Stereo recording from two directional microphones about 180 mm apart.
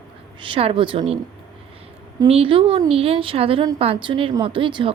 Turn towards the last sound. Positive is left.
turn(degrees=-25)  # may be behind; listen again after turning